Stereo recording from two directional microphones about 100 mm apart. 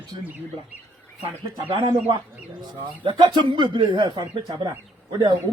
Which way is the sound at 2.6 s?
50° right (ahead or behind).